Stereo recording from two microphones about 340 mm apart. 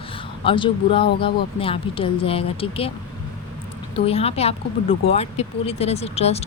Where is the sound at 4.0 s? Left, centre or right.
Centre.